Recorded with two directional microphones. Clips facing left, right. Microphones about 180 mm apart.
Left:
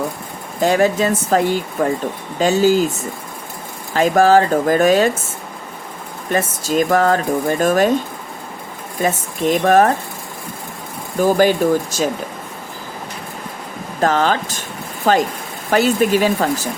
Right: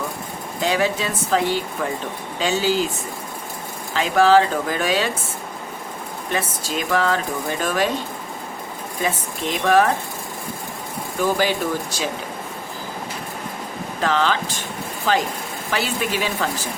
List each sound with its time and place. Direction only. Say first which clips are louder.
0.6 s speech: left 6 dB; 45° left (ahead or behind)
3.9 s speech: left 3 dB; 45° left (ahead or behind)
6.3 s speech: left 8 dB; 45° left (ahead or behind)
9.0 s speech: left 6 dB; 45° left (ahead or behind)
11.2 s speech: left 7 dB; 45° left (ahead or behind)
14.0 s speech: left 4 dB; 45° left (ahead or behind)